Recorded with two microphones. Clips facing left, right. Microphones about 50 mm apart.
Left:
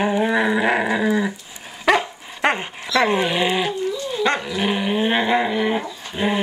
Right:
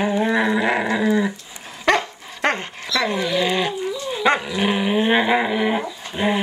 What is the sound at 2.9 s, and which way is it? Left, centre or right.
Dog, left.